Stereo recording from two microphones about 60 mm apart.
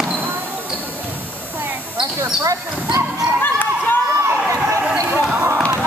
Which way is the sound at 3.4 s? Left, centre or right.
Left.